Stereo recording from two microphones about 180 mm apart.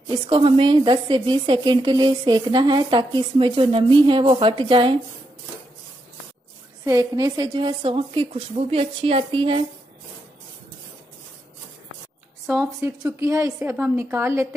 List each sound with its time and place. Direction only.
0.3 s a woman's voice: 30° right (ahead or behind)
6.8 s a woman's voice: 20° right (ahead or behind)
12.8 s a woman's voice: 15° right (ahead or behind)